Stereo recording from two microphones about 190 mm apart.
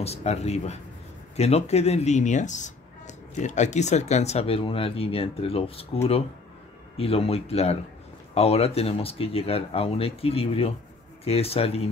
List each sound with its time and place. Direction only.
0.0 s speech: 35° left (ahead or behind)